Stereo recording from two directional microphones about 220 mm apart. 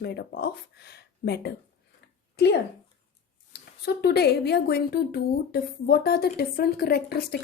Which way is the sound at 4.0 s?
45° left (ahead or behind).